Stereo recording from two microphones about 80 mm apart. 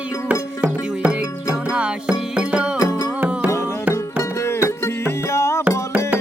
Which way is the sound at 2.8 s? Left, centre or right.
Left.